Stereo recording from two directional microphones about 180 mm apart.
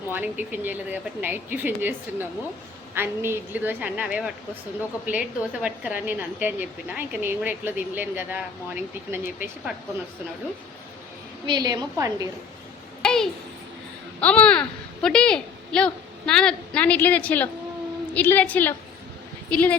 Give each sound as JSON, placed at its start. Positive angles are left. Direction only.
{"t": 0.1, "sound": "a woman's voice", "side_deg": -10}
{"t": 11.4, "sound": "a woman's voice", "side_deg": -25}
{"t": 13.0, "sound": "a sound", "side_deg": 5}
{"t": 14.2, "sound": "a child's voice", "side_deg": 5}